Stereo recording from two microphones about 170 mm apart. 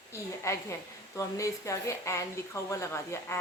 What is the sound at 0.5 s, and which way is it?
A woman's voice, 15° left (ahead or behind).